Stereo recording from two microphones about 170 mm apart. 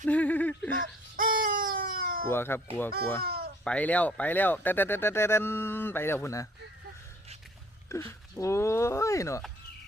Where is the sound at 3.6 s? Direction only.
10° left (ahead or behind).